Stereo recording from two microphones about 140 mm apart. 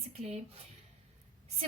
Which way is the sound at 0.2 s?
50° right (ahead or behind).